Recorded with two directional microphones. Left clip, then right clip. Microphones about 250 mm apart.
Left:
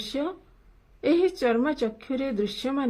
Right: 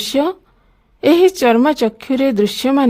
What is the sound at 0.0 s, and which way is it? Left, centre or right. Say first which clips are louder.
Speech: right 13 dB; right.